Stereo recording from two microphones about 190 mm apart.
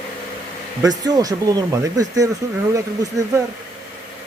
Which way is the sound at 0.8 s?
20° right (ahead or behind).